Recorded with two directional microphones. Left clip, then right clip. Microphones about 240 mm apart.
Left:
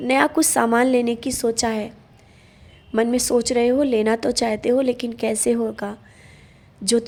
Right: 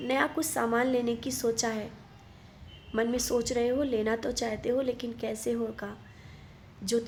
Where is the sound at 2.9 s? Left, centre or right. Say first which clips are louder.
Left 9 dB; left.